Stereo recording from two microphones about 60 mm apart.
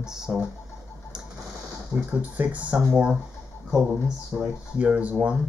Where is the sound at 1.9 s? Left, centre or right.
Right.